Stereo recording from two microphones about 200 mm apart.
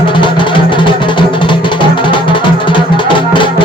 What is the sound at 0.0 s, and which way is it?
Music, 25° left (ahead or behind).